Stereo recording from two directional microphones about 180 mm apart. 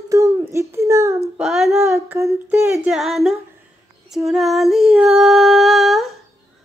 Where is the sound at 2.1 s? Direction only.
15° right (ahead or behind).